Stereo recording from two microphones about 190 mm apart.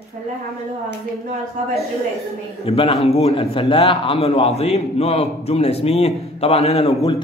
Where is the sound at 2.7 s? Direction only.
30° left (ahead or behind).